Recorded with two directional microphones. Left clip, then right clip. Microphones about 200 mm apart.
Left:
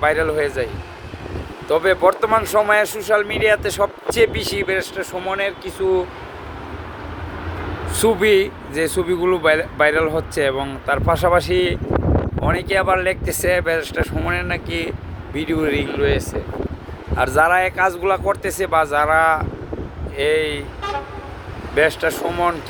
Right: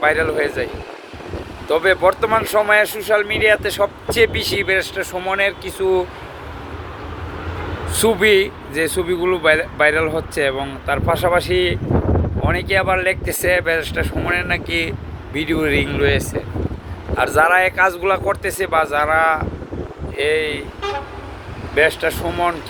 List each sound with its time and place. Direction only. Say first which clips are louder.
0.0 s speech: right 1 dB; 10° left (ahead or behind)
7.9 s speech: right 1 dB; 5° left (ahead or behind)
17.2 s speech: right 1 dB; 10° left (ahead or behind)
21.8 s speech: right 1 dB; 15° left (ahead or behind)